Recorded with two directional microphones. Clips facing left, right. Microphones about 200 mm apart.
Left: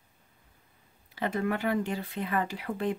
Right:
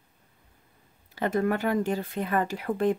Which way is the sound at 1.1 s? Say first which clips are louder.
Right 4 dB; 45° right (ahead or behind).